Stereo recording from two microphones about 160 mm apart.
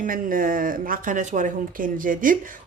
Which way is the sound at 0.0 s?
60° right (ahead or behind).